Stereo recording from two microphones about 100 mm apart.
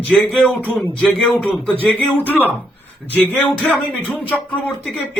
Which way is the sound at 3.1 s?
15° left (ahead or behind).